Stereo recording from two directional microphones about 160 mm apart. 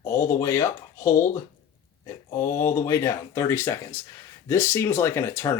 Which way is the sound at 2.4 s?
15° left (ahead or behind).